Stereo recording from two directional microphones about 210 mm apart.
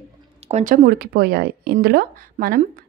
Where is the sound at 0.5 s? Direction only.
30° right (ahead or behind).